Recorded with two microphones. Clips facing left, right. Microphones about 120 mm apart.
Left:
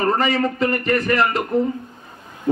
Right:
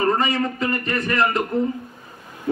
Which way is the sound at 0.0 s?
30° left (ahead or behind).